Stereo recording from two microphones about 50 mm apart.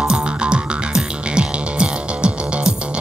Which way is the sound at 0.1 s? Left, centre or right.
Centre.